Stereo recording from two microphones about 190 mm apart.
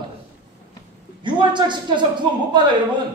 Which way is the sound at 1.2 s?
25° right (ahead or behind).